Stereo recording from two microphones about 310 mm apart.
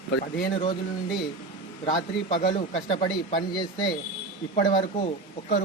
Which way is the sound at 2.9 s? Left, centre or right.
Centre.